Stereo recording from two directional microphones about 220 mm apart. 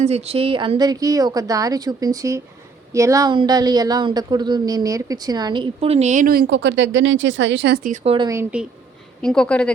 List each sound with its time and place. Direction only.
0.0 s a woman's voice: 30° right (ahead or behind); by 7.8 s 50° right (ahead or behind)
7.9 s a woman's voice: 30° right (ahead or behind); by 8.6 s 10° right (ahead or behind)
9.2 s speech: 5° left (ahead or behind)